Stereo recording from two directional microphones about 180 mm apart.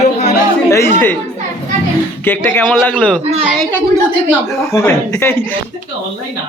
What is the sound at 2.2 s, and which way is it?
Speech, 10° left (ahead or behind).